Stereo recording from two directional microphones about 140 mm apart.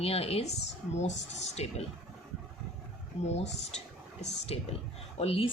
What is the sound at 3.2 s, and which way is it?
Speech, 50° left (ahead or behind).